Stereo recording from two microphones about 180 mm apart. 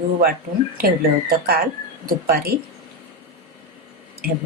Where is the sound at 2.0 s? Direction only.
55° right (ahead or behind).